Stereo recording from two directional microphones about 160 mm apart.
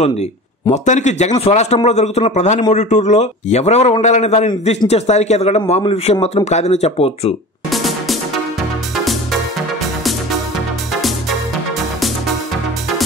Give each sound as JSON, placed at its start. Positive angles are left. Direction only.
{"t": 0.8, "sound": "a man's voice", "side_deg": 45}
{"t": 7.7, "sound": "music", "side_deg": 0}
{"t": 11.0, "sound": "music", "side_deg": 0}